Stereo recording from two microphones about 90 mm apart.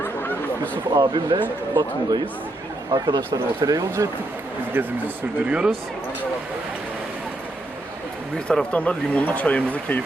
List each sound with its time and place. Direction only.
0.2 s a sound: 20° left (ahead or behind)
0.9 s a man's voice: 55° right (ahead or behind); by 4.1 s 40° right (ahead or behind)
4.7 s speech: 20° right (ahead or behind)
8.4 s speech: 15° left (ahead or behind)